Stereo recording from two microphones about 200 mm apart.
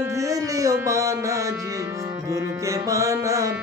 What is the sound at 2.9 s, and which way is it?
Music, 15° right (ahead or behind).